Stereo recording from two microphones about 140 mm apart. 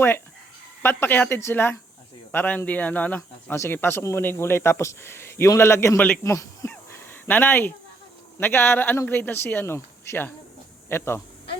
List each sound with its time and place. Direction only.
0.8 s speech: 15° left (ahead or behind)